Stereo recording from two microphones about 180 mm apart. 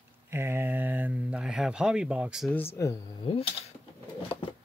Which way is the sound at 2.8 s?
15° left (ahead or behind).